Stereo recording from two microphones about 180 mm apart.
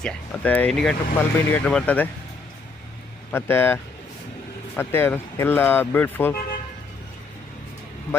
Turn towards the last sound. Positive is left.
turn(degrees=10)  # may be behind; listen again after turning